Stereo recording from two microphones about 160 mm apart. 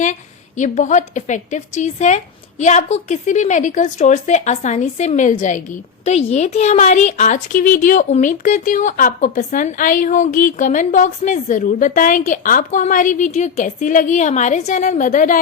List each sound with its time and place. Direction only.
0.0 s a woman's voice: 50° left (ahead or behind)